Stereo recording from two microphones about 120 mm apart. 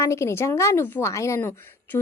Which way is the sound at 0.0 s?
25° left (ahead or behind).